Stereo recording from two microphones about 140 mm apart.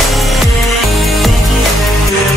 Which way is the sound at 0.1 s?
Centre (ahead or behind).